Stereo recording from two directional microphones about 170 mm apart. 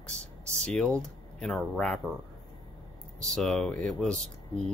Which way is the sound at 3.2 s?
5° left (ahead or behind).